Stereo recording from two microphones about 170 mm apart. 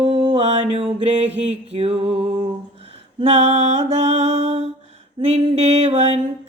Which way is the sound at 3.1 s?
40° right (ahead or behind).